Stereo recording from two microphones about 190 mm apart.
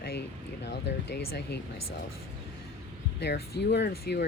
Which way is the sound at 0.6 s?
65° left (ahead or behind).